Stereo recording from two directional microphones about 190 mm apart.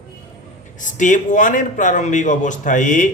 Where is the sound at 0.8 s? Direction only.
40° left (ahead or behind).